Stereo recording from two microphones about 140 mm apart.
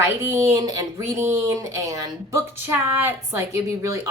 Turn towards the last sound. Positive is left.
turn(degrees=-20)  # may be behind; listen again after turning